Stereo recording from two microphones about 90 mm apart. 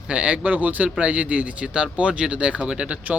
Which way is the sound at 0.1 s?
15° right (ahead or behind).